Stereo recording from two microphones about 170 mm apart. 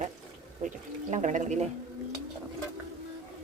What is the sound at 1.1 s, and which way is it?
Speech, 45° right (ahead or behind).